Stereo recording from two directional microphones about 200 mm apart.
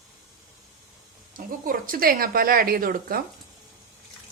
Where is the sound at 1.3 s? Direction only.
45° right (ahead or behind).